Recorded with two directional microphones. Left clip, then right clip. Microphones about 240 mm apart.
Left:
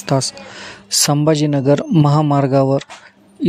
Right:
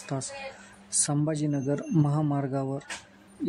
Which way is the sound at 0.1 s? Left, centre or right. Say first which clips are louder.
Left 15 dB; left.